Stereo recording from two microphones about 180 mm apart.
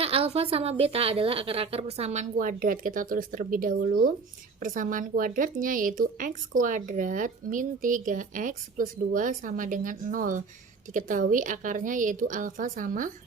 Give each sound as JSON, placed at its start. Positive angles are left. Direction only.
{"t": 0.0, "sound": "a woman's voice", "side_deg": -30}
{"t": 2.3, "sound": "a woman's voice", "side_deg": -50}